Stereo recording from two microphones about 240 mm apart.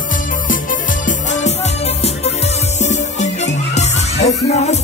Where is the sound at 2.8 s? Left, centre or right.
Left.